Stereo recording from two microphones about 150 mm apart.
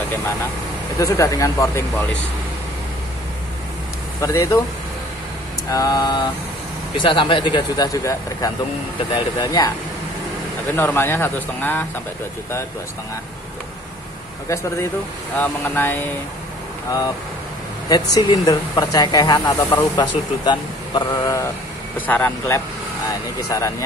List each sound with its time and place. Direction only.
0.9 s speech: 20° left (ahead or behind)
4.2 s speech: 20° left (ahead or behind)
5.7 s speech: 25° left (ahead or behind)
10.8 s speech: 15° left (ahead or behind)
15.3 s speech: 10° left (ahead or behind)
17.8 s speech: 25° left (ahead or behind)
21.9 s speech: 10° left (ahead or behind)
23.0 s speech: 20° left (ahead or behind)